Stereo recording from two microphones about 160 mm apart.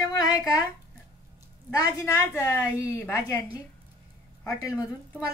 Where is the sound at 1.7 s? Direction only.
20° left (ahead or behind).